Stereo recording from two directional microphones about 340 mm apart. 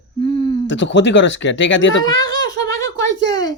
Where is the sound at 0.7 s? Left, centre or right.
Left.